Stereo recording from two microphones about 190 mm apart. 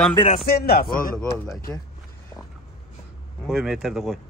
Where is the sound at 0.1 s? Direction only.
25° left (ahead or behind).